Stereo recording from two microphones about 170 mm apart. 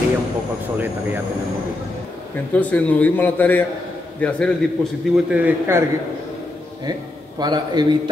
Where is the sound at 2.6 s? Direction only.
10° left (ahead or behind).